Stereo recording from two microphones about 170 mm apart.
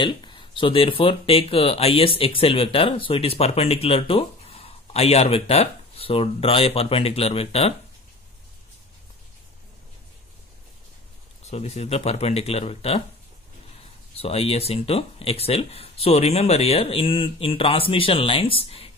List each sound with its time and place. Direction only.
0.0 s speech: 30° left (ahead or behind)
11.4 s speech: 40° left (ahead or behind)
14.1 s speech: 35° left (ahead or behind)